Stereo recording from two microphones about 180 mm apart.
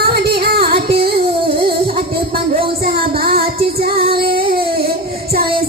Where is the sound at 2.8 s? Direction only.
55° right (ahead or behind).